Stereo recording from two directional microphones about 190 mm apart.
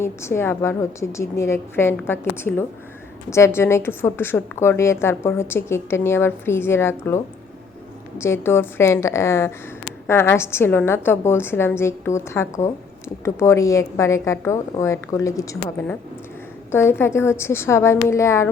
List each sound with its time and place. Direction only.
0.0 s a woman's voice: 15° left (ahead or behind)
8.2 s a woman's voice: 15° left (ahead or behind)